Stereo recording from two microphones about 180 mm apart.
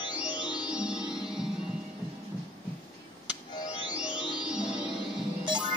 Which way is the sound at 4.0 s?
5° right (ahead or behind).